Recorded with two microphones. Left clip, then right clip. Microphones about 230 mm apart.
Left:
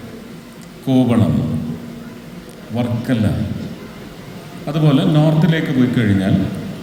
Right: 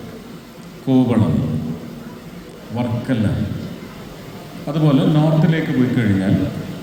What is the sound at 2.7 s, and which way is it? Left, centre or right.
Speech, left.